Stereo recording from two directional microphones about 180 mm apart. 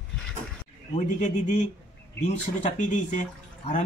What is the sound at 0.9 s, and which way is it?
A man's voice, 40° left (ahead or behind).